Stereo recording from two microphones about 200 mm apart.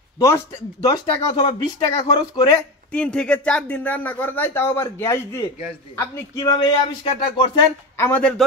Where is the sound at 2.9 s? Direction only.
5° left (ahead or behind).